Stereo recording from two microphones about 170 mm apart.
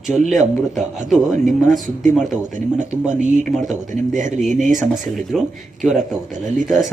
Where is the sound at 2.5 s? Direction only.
45° right (ahead or behind).